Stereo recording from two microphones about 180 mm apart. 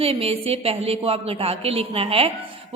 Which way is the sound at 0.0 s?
30° right (ahead or behind).